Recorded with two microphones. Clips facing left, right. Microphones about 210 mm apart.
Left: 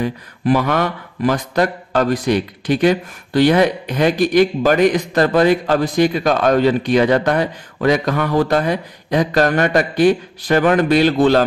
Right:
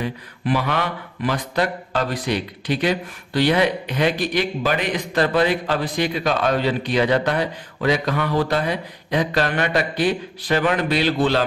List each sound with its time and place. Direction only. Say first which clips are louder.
0.0 s speech: left 6 dB; 45° left (ahead or behind)